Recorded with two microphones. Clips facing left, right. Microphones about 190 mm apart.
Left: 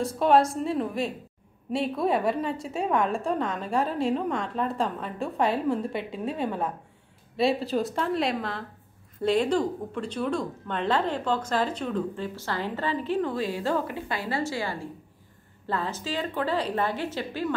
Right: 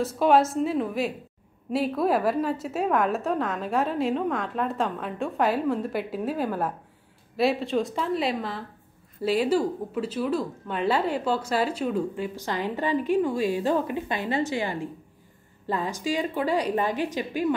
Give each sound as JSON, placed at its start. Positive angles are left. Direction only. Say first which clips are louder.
{"t": 0.0, "sound": "a woman's voice", "louder": "right 1 dB", "side_deg": 0}